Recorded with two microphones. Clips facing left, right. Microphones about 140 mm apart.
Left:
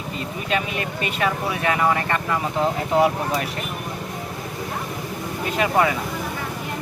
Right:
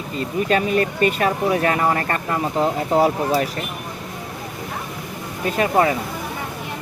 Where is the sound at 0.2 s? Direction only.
40° right (ahead or behind).